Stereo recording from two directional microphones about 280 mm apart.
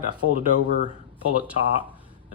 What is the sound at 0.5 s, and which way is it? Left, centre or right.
Speech, right.